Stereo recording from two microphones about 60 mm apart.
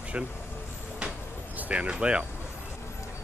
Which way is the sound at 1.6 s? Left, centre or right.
Right.